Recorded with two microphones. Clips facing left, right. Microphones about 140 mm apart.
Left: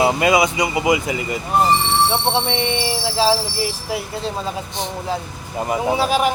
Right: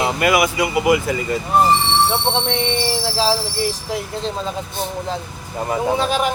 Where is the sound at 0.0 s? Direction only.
20° left (ahead or behind).